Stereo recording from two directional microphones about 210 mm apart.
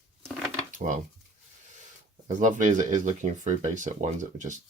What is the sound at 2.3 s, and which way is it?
Speech, 35° right (ahead or behind).